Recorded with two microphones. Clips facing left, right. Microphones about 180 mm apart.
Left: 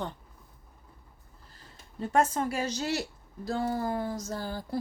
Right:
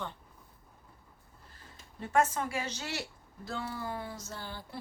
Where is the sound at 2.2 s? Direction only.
35° left (ahead or behind).